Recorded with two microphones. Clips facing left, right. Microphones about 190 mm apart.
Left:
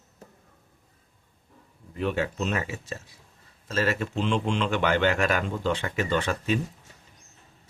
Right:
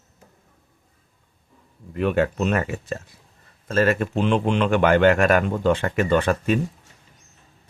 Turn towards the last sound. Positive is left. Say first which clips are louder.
# right 6 dB
turn(degrees=-55)  # may be behind; listen again after turning